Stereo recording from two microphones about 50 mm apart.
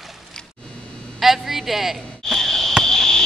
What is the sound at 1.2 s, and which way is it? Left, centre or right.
Speech, centre.